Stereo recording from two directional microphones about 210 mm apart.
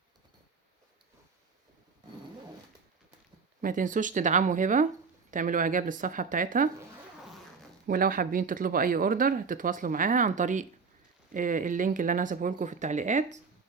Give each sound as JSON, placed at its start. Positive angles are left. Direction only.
{"t": 3.6, "sound": "speech", "side_deg": -40}
{"t": 7.9, "sound": "speech", "side_deg": -45}